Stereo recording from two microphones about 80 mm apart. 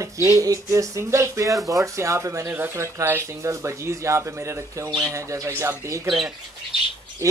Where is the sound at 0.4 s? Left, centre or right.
Right.